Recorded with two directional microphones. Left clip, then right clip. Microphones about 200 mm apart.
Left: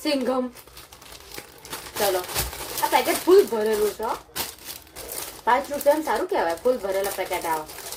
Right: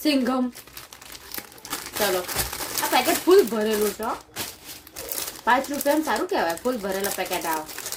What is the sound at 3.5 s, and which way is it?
Speech, 20° right (ahead or behind).